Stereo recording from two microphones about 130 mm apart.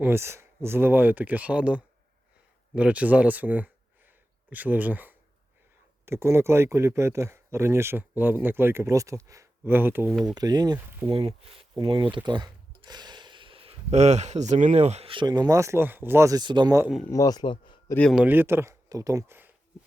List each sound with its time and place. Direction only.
0.0 s speech: 20° right (ahead or behind)
10.1 s speech: centre (ahead or behind)
10.3 s speech: 30° right (ahead or behind)
11.1 s speech: 50° right (ahead or behind)
12.1 s a sound: 35° right (ahead or behind)
13.9 s speech: 60° right (ahead or behind); by 16.4 s 20° right (ahead or behind)
16.4 s speech: 35° right (ahead or behind)
17.1 s speech: 30° left (ahead or behind)
18.1 s speech: 10° right (ahead or behind)